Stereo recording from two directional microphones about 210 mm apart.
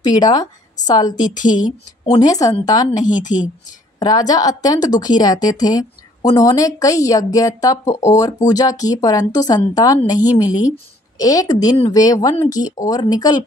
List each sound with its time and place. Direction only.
0.0 s a woman's voice: 20° left (ahead or behind)
1.2 s speech: 40° left (ahead or behind)
2.0 s a woman's voice: 15° left (ahead or behind)
3.0 s speech: 35° left (ahead or behind)
4.0 s a woman's voice: 20° left (ahead or behind)
11.1 s a woman's voice: 15° left (ahead or behind)